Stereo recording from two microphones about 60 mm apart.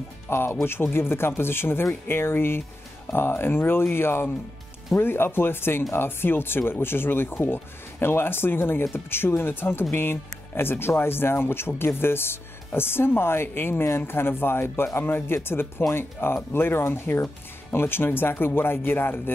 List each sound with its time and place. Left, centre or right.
0.3 s speech: left